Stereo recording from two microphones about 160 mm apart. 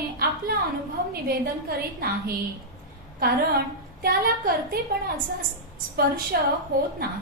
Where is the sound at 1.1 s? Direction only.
70° right (ahead or behind).